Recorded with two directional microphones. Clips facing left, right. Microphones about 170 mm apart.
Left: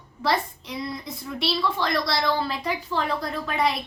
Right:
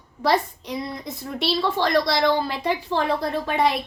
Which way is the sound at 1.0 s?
25° right (ahead or behind).